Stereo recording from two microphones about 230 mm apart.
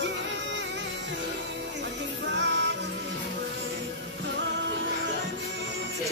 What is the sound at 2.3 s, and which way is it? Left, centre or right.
Music, right.